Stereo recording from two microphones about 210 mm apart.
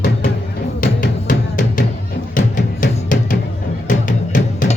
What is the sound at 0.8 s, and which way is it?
Music, 40° left (ahead or behind).